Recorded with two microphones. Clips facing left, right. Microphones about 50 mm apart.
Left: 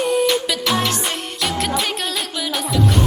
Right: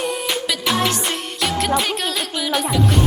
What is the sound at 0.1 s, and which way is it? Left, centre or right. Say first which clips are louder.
Music: left 5 dB; centre.